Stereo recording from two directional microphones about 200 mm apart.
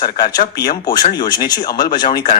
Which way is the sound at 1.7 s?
50° left (ahead or behind).